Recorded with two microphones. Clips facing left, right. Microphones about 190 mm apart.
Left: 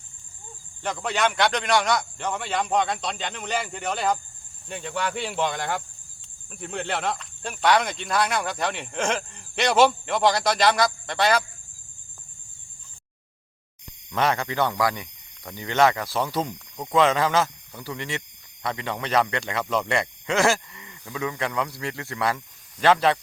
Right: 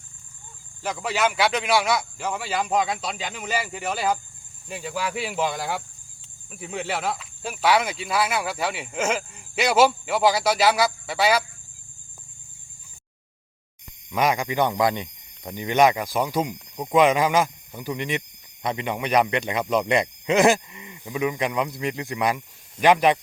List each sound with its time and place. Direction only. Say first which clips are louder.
0.8 s speech: right 1 dB; 5° right (ahead or behind)
14.1 s speech: right 1 dB; 10° right (ahead or behind)